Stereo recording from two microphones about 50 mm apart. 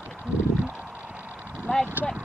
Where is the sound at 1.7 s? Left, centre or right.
Centre.